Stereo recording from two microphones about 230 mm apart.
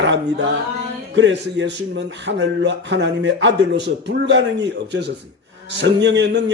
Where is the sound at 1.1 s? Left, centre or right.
Right.